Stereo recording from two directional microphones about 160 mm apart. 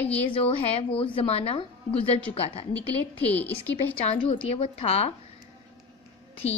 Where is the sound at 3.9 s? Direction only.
35° left (ahead or behind).